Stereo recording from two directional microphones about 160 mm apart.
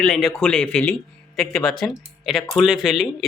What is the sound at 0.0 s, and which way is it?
Speech, 5° left (ahead or behind).